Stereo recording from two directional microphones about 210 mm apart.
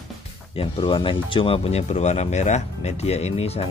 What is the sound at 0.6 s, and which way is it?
Speech, 25° left (ahead or behind).